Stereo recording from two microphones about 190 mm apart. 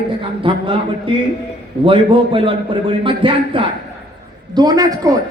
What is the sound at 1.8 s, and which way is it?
Speech, 25° right (ahead or behind).